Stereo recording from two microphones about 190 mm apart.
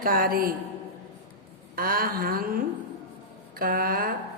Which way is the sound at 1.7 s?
50° right (ahead or behind).